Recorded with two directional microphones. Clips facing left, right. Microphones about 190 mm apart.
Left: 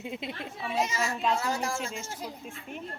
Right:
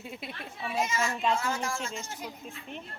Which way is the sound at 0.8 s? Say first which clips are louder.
Even; 35° left (ahead or behind).